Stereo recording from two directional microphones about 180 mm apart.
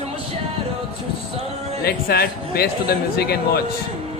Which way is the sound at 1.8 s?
60° left (ahead or behind).